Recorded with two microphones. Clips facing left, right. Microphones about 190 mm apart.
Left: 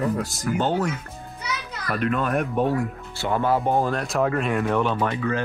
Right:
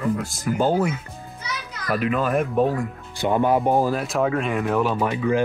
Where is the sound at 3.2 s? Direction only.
15° right (ahead or behind).